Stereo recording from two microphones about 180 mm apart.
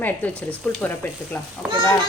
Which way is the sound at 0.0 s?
10° left (ahead or behind).